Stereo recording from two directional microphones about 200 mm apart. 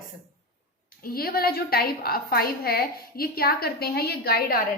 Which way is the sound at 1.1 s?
50° left (ahead or behind).